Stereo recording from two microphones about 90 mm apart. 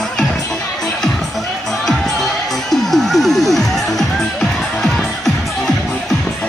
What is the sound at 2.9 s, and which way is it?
Music, centre (ahead or behind).